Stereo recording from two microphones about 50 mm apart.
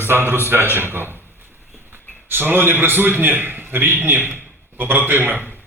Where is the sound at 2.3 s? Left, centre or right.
Right.